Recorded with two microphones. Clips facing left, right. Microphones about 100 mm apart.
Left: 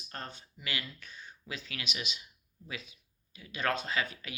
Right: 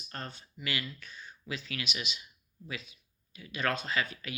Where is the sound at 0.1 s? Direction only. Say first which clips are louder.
Right 1 dB; 35° left (ahead or behind).